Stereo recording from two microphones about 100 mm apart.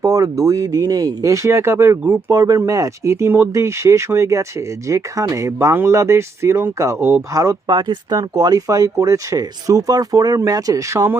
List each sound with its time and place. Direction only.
0.0 s speech: 35° right (ahead or behind)
7.7 s speech: 45° right (ahead or behind); by 11.2 s 25° right (ahead or behind)